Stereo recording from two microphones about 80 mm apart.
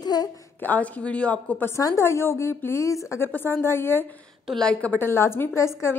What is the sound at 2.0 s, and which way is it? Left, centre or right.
A woman's voice, left.